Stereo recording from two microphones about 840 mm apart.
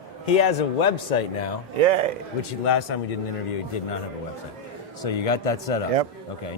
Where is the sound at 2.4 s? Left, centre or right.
Left.